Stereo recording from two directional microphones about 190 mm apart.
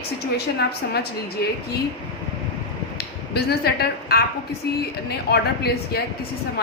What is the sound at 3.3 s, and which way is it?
Speech, 55° left (ahead or behind).